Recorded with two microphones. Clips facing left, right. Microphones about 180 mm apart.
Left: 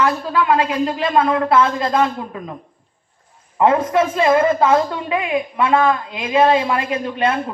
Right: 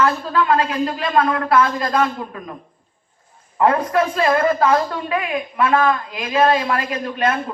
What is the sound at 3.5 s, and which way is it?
A man's voice, 20° left (ahead or behind).